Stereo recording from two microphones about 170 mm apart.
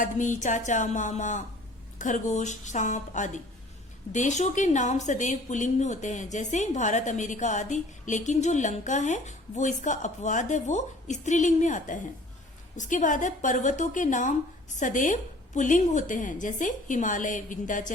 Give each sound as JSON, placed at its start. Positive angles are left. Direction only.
{"t": 0.0, "sound": "a woman's voice", "side_deg": 45}